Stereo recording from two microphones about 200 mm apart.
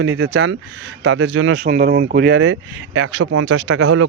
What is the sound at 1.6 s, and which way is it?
Speech, 50° right (ahead or behind).